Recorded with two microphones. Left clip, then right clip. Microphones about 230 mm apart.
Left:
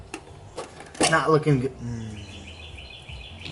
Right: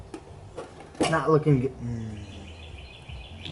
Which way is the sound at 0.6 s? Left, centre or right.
Centre.